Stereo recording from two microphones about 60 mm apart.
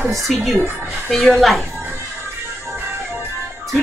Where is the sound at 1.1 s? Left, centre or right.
Centre.